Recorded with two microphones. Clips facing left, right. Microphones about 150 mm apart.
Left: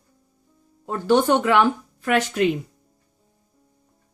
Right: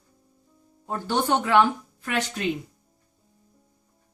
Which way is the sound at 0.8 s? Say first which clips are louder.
Left 7 dB; 80° left.